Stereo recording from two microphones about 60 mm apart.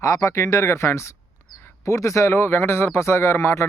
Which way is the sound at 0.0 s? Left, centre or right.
Left.